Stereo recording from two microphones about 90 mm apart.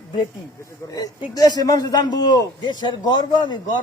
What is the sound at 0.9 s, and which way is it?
A man's voice, 45° left (ahead or behind).